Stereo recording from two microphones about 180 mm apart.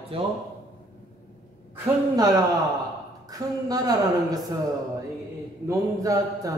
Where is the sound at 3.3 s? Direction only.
20° right (ahead or behind).